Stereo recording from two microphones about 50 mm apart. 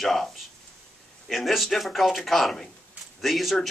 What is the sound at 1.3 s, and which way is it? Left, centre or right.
A man's voice, centre.